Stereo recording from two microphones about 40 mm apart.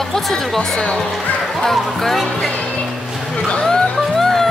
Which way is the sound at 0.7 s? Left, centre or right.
Centre.